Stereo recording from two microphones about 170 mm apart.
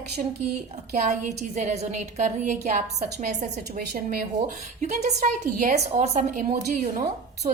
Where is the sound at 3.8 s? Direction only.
70° right (ahead or behind).